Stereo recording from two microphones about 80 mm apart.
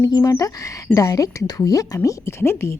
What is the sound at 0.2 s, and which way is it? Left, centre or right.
Speech, left.